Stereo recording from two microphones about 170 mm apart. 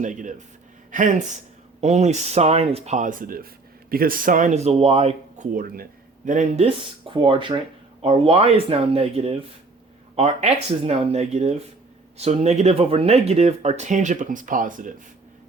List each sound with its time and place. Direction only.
0.0 s speech: 50° right (ahead or behind)
5.5 s speech: 55° right (ahead or behind)
6.2 s speech: 45° right (ahead or behind)